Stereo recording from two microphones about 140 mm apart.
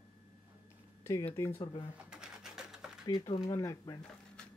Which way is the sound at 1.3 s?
15° left (ahead or behind).